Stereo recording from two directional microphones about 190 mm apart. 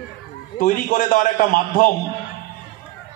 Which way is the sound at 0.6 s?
45° left (ahead or behind).